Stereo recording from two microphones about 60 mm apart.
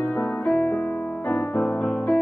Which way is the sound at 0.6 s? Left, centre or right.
Centre.